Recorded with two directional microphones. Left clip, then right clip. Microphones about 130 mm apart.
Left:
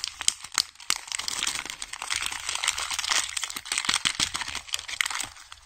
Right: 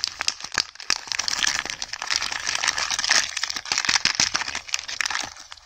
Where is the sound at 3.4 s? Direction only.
45° right (ahead or behind).